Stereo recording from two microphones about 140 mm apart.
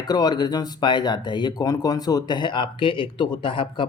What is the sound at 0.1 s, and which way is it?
Speech, 30° left (ahead or behind).